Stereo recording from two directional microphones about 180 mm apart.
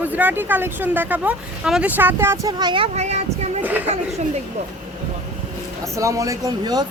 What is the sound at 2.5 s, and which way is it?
Speech, 25° right (ahead or behind).